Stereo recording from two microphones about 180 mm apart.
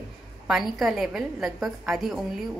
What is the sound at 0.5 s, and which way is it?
A woman's voice, centre (ahead or behind).